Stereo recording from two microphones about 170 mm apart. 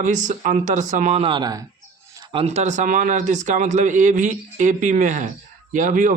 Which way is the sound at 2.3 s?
40° right (ahead or behind).